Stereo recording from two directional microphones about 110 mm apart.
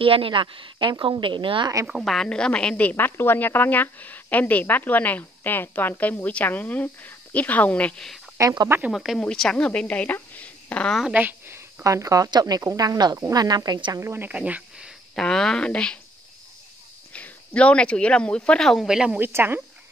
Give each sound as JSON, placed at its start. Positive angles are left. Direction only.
{"t": 0.0, "sound": "a woman's voice", "side_deg": -55}
{"t": 1.9, "sound": "speech", "side_deg": -5}
{"t": 2.1, "sound": "a woman's voice", "side_deg": 5}
{"t": 8.4, "sound": "speech", "side_deg": -30}
{"t": 8.9, "sound": "speech", "side_deg": 0}
{"t": 11.1, "sound": "speech", "side_deg": -20}
{"t": 13.9, "sound": "speech", "side_deg": -20}
{"t": 15.1, "sound": "a woman's voice", "side_deg": 5}
{"t": 17.1, "sound": "speech", "side_deg": 10}
{"t": 19.1, "sound": "speech", "side_deg": -20}